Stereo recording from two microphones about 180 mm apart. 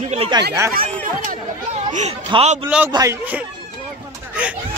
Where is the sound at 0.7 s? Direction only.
55° right (ahead or behind).